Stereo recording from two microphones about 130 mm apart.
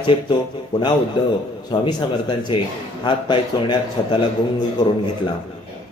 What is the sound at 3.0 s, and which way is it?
Speech, 35° left (ahead or behind).